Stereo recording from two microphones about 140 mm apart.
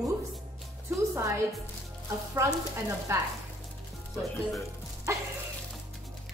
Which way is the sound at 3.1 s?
20° right (ahead or behind).